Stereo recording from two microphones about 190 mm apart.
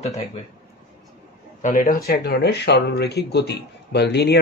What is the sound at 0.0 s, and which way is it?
Speech, 35° left (ahead or behind).